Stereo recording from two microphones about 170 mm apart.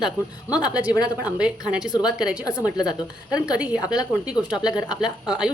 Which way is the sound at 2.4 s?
20° left (ahead or behind).